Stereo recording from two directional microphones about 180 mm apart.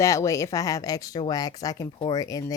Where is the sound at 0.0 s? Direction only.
15° left (ahead or behind).